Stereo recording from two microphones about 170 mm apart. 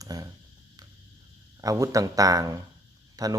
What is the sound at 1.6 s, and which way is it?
Speech, 20° right (ahead or behind).